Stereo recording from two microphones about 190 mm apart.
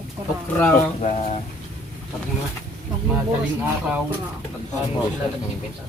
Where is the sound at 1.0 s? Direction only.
35° left (ahead or behind).